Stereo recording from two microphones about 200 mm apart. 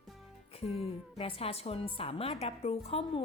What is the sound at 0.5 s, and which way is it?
A woman's voice, 30° left (ahead or behind).